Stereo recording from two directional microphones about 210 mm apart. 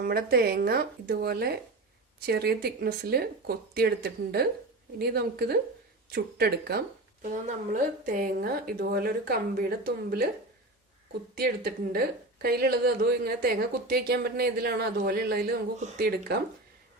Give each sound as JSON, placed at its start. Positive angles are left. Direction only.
{"t": 0.0, "sound": "a woman's voice", "side_deg": -45}
{"t": 11.3, "sound": "a woman's voice", "side_deg": -45}